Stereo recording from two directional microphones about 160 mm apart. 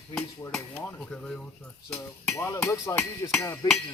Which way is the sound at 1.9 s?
15° left (ahead or behind).